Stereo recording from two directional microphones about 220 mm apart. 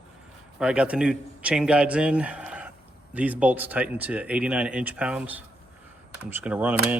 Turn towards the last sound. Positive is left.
turn(degrees=-5)  # may be behind; listen again after turning